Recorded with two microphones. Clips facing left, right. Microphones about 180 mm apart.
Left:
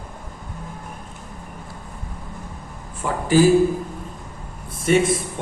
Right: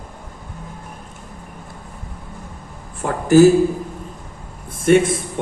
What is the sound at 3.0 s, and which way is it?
Speech, 50° right (ahead or behind).